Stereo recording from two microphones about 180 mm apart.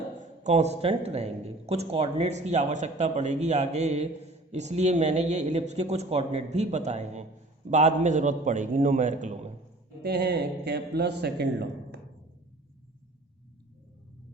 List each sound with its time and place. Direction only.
0.4 s a man's voice: 35° right (ahead or behind)
10.0 s a man's voice: 65° right (ahead or behind)